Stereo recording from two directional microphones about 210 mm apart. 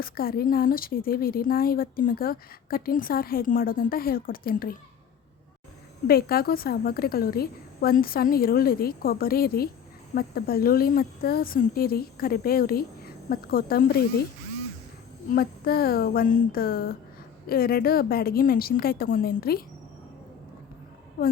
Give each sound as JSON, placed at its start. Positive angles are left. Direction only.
{"t": 0.0, "sound": "a woman's voice", "side_deg": 45}
{"t": 6.1, "sound": "a woman's voice", "side_deg": 45}
{"t": 15.4, "sound": "a woman's voice", "side_deg": 45}
{"t": 21.2, "sound": "a woman's voice", "side_deg": 45}